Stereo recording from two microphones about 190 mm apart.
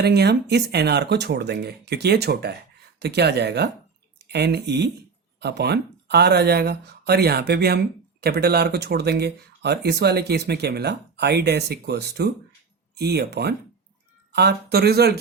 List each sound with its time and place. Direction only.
0.0 s speech: 60° right (ahead or behind)